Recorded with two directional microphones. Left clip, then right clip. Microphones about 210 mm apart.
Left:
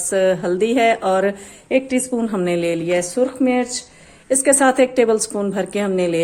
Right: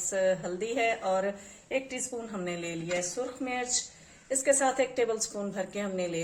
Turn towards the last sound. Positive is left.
turn(degrees=50)  # may be behind; listen again after turning